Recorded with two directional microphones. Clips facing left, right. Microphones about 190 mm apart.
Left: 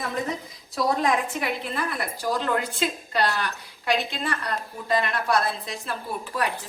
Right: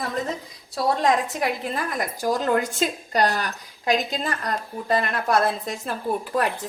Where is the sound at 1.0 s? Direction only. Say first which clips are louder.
Right 3 dB; 40° right (ahead or behind).